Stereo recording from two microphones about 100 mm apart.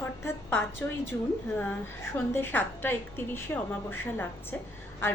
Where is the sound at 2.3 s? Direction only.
20° left (ahead or behind).